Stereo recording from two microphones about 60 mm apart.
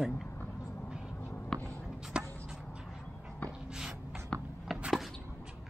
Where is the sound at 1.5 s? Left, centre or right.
Centre.